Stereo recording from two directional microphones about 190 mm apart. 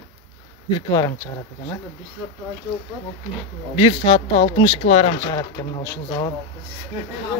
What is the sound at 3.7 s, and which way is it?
Speech, 25° left (ahead or behind).